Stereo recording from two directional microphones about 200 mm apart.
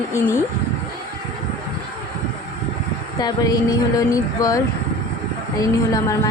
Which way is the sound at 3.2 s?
20° left (ahead or behind).